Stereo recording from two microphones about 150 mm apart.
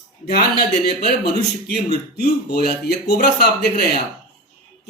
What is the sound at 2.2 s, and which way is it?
Speech, 90° left.